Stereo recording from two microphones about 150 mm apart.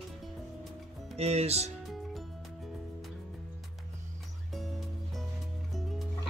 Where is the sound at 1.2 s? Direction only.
45° right (ahead or behind).